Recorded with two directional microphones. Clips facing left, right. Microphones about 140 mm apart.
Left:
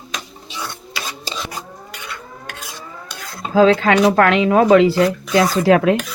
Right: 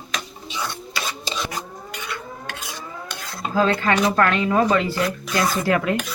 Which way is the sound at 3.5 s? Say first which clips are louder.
Left 7 dB; 90° left.